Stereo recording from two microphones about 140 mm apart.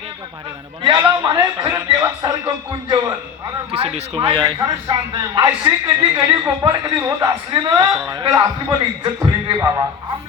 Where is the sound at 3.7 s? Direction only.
45° right (ahead or behind).